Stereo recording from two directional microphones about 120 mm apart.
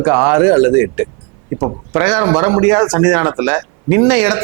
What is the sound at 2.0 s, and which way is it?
Speech, 10° right (ahead or behind).